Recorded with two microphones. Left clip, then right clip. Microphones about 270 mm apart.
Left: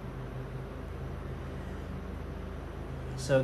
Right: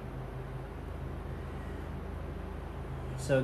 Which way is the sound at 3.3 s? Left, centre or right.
Centre.